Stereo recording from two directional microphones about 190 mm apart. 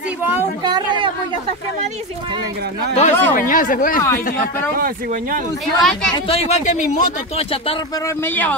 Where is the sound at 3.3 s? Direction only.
45° left (ahead or behind).